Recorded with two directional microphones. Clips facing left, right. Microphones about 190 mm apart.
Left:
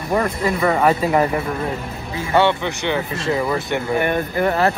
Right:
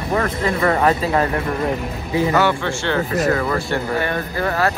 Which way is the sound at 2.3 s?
20° left (ahead or behind).